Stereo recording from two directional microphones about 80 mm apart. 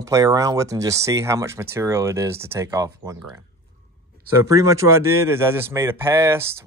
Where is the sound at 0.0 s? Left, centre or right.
Right.